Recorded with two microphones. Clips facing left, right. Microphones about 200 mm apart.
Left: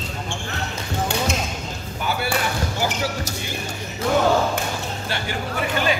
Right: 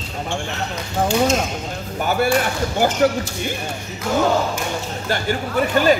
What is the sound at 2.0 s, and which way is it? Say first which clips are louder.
Speech: right 6 dB; 45° right (ahead or behind).